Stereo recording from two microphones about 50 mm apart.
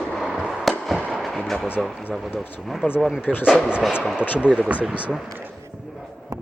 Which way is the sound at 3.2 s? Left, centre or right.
Left.